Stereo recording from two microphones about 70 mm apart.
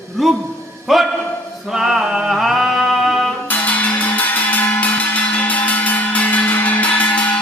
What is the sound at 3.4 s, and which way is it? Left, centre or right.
Music, left.